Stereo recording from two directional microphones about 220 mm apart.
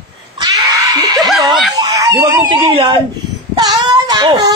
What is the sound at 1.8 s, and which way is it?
Speech, 15° right (ahead or behind).